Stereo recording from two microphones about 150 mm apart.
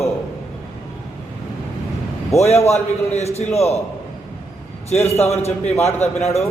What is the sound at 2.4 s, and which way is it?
A man's voice, 45° left (ahead or behind).